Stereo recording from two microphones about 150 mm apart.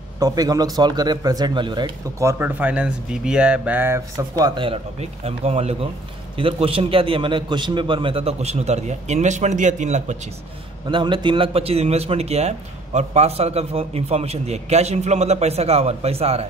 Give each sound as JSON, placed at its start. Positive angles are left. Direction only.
{"t": 0.2, "sound": "speech", "side_deg": -25}
{"t": 2.2, "sound": "speech", "side_deg": -15}
{"t": 4.6, "sound": "a man's voice", "side_deg": -40}
{"t": 10.9, "sound": "a man's voice", "side_deg": -30}